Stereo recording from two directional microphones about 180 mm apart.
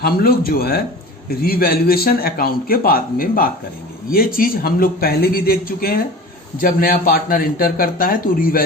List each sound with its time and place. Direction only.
0.0 s a man's voice: 55° left (ahead or behind)